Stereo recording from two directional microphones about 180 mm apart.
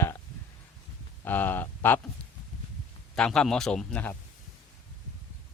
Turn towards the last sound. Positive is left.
turn(degrees=5)  # may be behind; listen again after turning